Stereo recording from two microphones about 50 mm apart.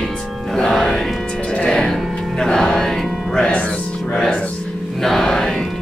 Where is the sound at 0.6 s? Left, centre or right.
Centre.